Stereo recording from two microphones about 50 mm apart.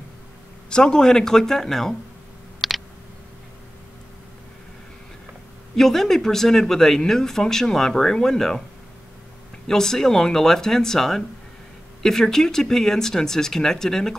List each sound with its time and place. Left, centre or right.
0.7 s speech: centre
2.6 s a sound: centre
5.8 s speech: centre
9.7 s speech: centre